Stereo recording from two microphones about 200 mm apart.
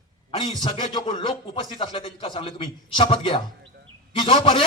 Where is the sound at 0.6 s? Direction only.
25° left (ahead or behind).